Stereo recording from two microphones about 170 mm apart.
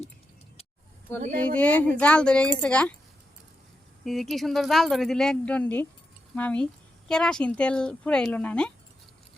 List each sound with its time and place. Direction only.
1.4 s speech: 5° left (ahead or behind)
4.0 s speech: centre (ahead or behind)